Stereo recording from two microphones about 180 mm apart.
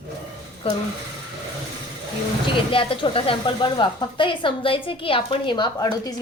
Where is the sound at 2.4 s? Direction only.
30° left (ahead or behind).